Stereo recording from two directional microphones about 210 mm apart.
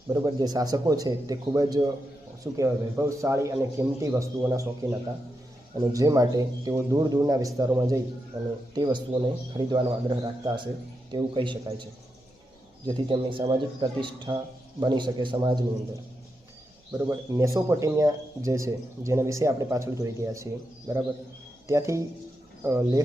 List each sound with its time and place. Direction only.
0.1 s a man's voice: 20° right (ahead or behind)
16.9 s speech: 15° right (ahead or behind)